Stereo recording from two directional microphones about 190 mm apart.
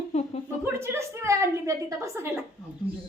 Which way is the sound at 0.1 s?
35° left (ahead or behind).